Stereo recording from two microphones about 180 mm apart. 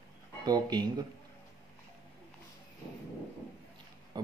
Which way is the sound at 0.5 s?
25° right (ahead or behind).